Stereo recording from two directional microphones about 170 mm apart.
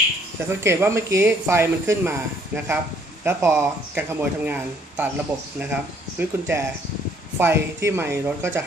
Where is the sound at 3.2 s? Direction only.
15° right (ahead or behind).